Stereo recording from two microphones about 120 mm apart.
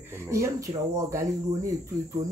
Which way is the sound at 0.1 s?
25° right (ahead or behind).